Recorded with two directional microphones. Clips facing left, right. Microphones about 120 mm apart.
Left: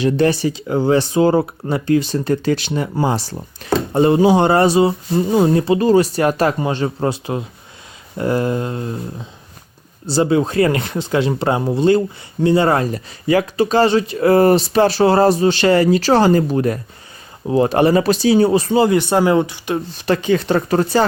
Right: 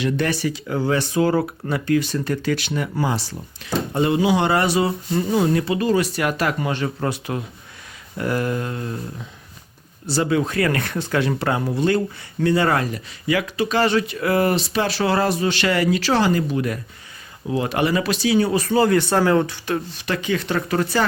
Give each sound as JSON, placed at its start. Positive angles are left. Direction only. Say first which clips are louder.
{"t": 0.0, "sound": "speech", "louder": "left 6 dB", "side_deg": 30}
{"t": 20.1, "sound": "speech", "louder": "left 8 dB", "side_deg": 30}